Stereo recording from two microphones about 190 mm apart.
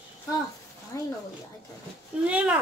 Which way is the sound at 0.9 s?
15° left (ahead or behind).